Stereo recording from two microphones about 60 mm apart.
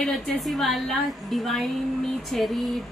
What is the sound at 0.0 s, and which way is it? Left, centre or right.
A woman's voice, centre.